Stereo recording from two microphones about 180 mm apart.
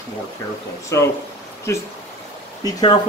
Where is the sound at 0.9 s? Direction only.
15° left (ahead or behind).